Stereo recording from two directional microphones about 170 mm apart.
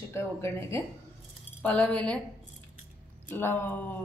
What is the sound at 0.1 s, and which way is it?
A woman's voice, 15° left (ahead or behind).